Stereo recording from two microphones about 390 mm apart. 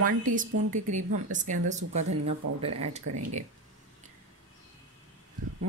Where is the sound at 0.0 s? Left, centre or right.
Right.